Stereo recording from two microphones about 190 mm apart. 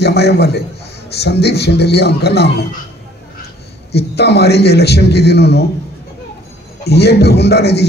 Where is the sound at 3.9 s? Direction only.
60° left (ahead or behind).